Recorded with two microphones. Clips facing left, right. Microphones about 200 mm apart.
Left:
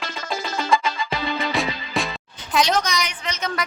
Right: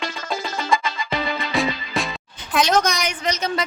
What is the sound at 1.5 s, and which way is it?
Music, centre (ahead or behind).